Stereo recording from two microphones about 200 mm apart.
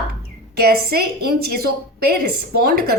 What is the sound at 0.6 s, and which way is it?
A woman's voice, 50° right (ahead or behind).